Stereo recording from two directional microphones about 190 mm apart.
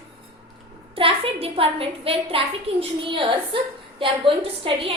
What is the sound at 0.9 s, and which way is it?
A woman's voice, 30° right (ahead or behind).